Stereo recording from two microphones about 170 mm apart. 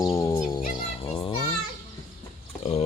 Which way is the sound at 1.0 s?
30° left (ahead or behind).